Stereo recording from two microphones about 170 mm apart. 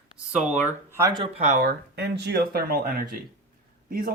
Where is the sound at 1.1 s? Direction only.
30° right (ahead or behind).